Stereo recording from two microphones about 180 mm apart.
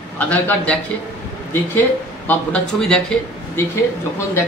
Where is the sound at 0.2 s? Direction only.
10° left (ahead or behind).